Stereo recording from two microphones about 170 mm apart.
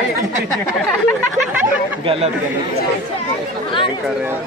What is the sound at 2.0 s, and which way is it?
Speech, 35° right (ahead or behind).